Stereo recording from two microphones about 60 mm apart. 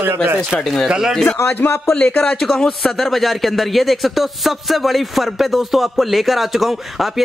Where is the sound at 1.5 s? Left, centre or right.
Left.